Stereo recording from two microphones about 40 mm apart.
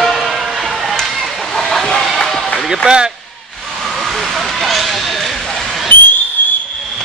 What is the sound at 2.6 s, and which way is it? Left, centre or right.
Basketball bounce, centre.